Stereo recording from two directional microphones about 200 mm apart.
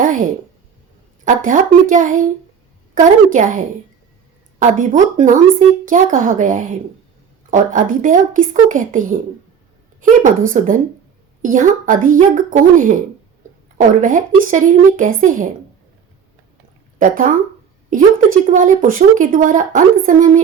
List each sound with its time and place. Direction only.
0.0 s a sound: 40° right (ahead or behind)
1.2 s speech: 40° right (ahead or behind)
4.8 s speech: 40° right (ahead or behind)
10.5 s speech: 35° right (ahead or behind)
17.0 s speech: 40° right (ahead or behind)